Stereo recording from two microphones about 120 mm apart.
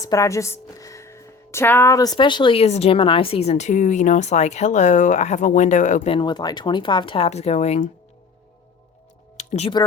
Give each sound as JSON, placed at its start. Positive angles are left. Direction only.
{"t": 0.0, "sound": "a woman's voice", "side_deg": 25}
{"t": 2.1, "sound": "speech", "side_deg": 40}
{"t": 6.1, "sound": "speech", "side_deg": 40}
{"t": 7.3, "sound": "speech", "side_deg": 65}
{"t": 9.4, "sound": "music", "side_deg": 65}